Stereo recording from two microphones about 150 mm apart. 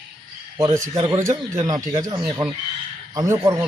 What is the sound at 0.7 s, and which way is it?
Speech, 20° right (ahead or behind).